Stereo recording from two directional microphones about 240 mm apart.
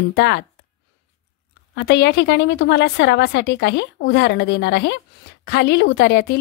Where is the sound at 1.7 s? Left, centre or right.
Left.